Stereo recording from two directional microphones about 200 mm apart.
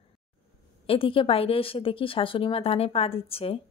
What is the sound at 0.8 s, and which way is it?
A woman's voice, 25° left (ahead or behind).